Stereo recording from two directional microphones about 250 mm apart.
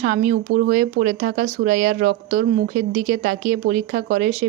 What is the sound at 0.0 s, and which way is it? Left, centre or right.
A woman's voice, right.